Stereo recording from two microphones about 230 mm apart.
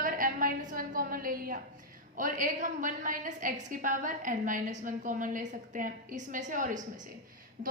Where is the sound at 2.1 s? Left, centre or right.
Right.